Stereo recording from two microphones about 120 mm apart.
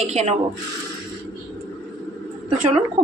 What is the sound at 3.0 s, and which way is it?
Speech, 70° right (ahead or behind).